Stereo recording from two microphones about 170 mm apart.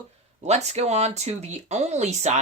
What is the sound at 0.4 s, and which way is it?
Speech, 40° right (ahead or behind).